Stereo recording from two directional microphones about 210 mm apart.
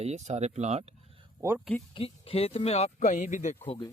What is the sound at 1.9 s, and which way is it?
Speech, 25° left (ahead or behind).